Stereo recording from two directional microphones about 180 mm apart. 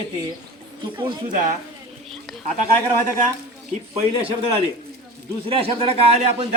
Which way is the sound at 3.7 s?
35° right (ahead or behind).